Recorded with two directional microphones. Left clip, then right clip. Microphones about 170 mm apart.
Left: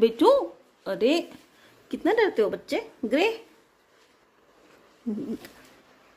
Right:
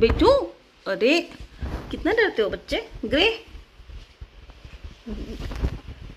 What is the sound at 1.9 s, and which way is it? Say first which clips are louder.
Speech: right 1 dB; 20° left (ahead or behind).